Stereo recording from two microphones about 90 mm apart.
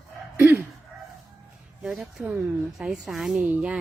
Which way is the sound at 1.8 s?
5° right (ahead or behind).